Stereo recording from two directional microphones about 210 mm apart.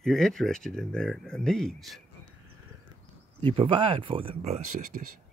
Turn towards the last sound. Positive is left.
turn(degrees=-30)  # may be behind; listen again after turning